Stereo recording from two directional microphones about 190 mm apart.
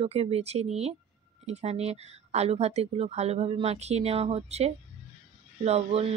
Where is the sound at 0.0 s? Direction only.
35° right (ahead or behind).